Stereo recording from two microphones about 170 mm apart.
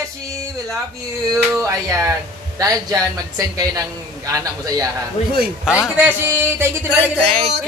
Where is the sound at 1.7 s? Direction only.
20° right (ahead or behind).